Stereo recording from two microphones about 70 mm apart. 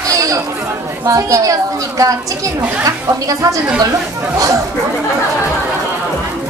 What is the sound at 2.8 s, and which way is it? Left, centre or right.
Speech, right.